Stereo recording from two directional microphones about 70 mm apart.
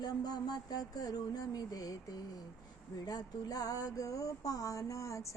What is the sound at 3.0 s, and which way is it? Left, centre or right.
Female singing, left.